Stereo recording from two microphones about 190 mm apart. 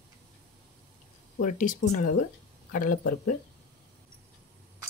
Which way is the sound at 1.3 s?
45° left (ahead or behind).